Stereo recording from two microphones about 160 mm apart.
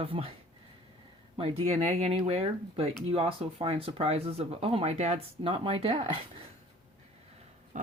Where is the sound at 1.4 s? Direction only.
40° right (ahead or behind).